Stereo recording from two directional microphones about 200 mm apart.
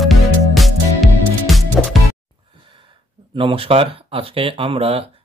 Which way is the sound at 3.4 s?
30° right (ahead or behind).